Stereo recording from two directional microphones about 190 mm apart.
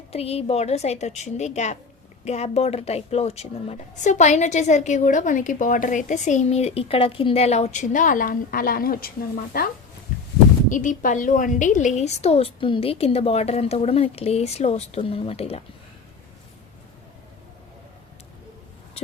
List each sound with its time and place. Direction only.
0.1 s a woman's voice: 30° left (ahead or behind); by 9.6 s 50° left (ahead or behind)
10.7 s a woman's voice: 45° left (ahead or behind)